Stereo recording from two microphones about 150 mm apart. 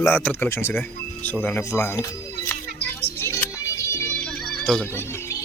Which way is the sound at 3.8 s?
20° left (ahead or behind).